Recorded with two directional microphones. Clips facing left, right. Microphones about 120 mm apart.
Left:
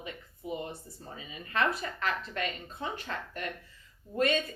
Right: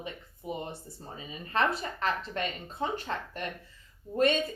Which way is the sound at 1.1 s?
35° right (ahead or behind).